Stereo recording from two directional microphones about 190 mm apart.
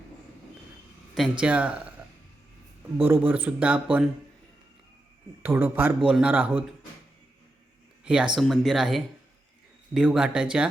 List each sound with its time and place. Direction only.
1.1 s speech: 5° right (ahead or behind)
3.0 s speech: 10° right (ahead or behind)
5.4 s speech: 10° right (ahead or behind)
8.0 s speech: 5° right (ahead or behind)